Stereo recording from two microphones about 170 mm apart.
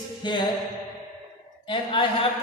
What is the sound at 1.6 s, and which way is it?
Speech, 30° left (ahead or behind).